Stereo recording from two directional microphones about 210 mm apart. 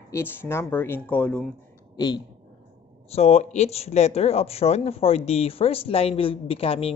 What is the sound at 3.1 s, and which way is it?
Speech, 30° left (ahead or behind).